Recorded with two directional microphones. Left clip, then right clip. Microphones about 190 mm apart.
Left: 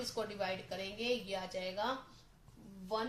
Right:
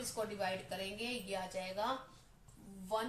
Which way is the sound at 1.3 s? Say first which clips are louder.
Left 1 dB; 30° left (ahead or behind).